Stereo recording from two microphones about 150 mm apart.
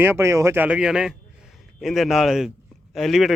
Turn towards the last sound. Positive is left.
turn(degrees=0)  # may be behind; listen again after turning